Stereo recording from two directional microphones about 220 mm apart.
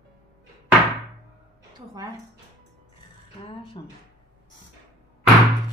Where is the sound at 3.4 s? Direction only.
20° left (ahead or behind).